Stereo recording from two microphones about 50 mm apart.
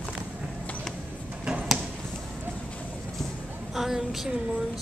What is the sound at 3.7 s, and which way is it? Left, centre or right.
Speech, centre.